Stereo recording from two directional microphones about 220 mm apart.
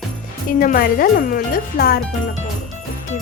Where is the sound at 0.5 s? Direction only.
40° left (ahead or behind).